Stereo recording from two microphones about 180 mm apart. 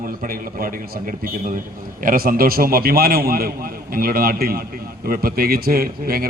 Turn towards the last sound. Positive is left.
turn(degrees=-55)  # may be behind; listen again after turning